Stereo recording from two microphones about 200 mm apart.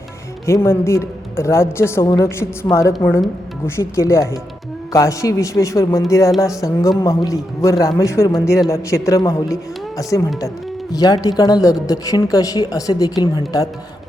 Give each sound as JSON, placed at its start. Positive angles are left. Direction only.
{"t": 0.4, "sound": "a woman's voice", "side_deg": 15}